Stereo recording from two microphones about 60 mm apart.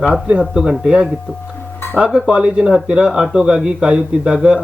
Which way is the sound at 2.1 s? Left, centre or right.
Centre.